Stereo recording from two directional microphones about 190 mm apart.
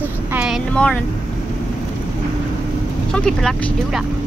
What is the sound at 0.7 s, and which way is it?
Speech, 5° left (ahead or behind).